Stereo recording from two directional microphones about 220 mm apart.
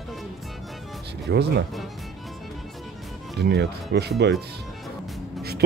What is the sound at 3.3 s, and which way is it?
Speech, 50° right (ahead or behind).